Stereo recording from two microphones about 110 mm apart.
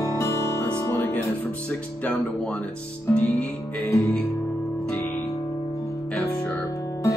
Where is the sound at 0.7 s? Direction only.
25° left (ahead or behind).